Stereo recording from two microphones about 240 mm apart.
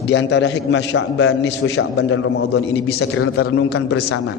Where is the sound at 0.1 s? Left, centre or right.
Left.